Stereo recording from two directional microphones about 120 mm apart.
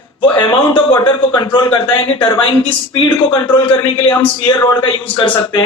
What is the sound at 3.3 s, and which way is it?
A man's voice, 35° left (ahead or behind).